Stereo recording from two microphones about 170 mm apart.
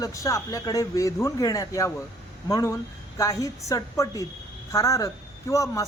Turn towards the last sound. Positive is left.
turn(degrees=20)  # may be behind; listen again after turning